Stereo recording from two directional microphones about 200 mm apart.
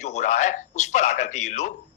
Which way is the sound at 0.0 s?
35° left (ahead or behind).